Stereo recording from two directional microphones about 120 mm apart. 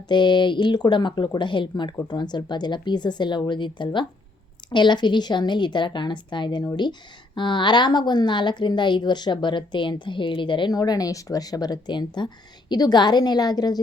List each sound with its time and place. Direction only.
0.1 s a woman's voice: 40° left (ahead or behind)